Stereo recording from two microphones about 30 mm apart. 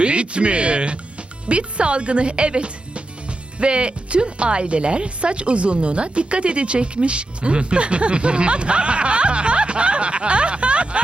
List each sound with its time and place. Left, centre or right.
0.0 s speech: right